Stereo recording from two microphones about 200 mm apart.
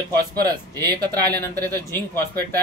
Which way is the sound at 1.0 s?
10° left (ahead or behind).